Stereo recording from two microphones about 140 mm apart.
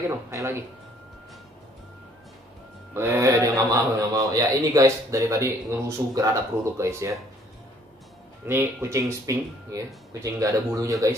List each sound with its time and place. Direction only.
0.3 s a man's voice: 20° right (ahead or behind)
2.9 s a man's voice: 20° right (ahead or behind)
8.5 s a man's voice: 15° right (ahead or behind)